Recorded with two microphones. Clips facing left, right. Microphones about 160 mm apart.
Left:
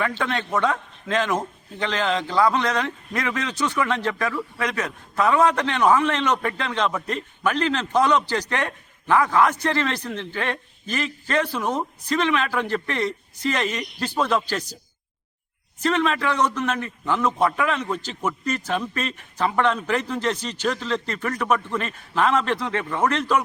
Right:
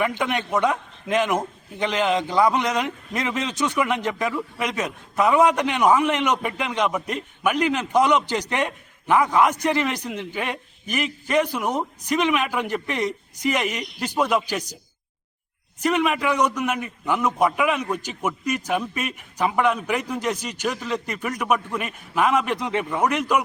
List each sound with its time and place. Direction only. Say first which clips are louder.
0.0 s a man's voice: right 1 dB; 15° right (ahead or behind)
15.8 s a man's voice: even; 15° right (ahead or behind)